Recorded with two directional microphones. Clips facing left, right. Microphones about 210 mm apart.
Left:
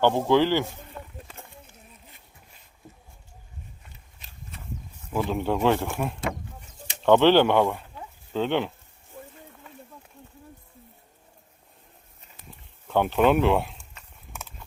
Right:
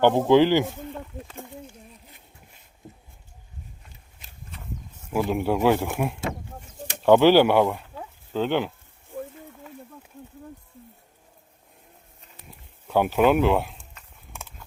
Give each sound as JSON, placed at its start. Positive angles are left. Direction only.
{"t": 0.0, "sound": "speech", "side_deg": -20}
{"t": 5.1, "sound": "speech", "side_deg": -10}
{"t": 12.9, "sound": "speech", "side_deg": -5}